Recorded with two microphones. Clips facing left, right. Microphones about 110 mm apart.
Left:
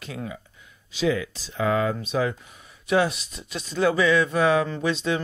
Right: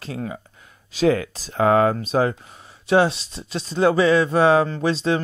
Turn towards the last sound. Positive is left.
turn(degrees=-35)  # may be behind; listen again after turning